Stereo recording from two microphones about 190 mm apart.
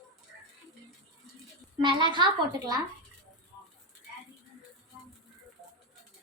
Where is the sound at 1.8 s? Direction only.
25° right (ahead or behind).